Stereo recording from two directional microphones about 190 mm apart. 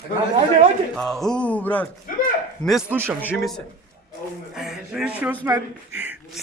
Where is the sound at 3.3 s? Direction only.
5° left (ahead or behind).